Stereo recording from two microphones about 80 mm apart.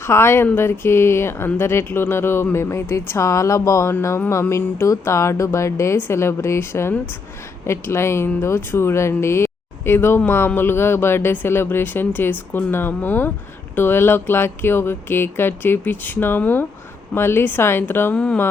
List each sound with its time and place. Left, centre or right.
0.0 s speech: left